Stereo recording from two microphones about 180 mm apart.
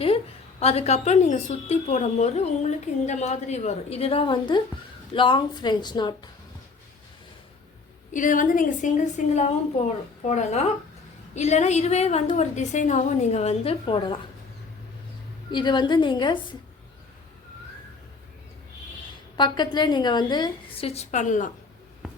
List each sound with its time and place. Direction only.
0.6 s a woman's voice: 35° left (ahead or behind)
8.1 s a woman's voice: 45° left (ahead or behind); by 14.2 s 30° left (ahead or behind)
15.4 s a woman's voice: 25° left (ahead or behind)
19.4 s a woman's voice: 25° left (ahead or behind); by 21.5 s 45° left (ahead or behind)